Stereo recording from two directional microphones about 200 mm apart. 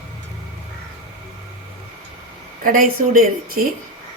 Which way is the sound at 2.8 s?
45° right (ahead or behind).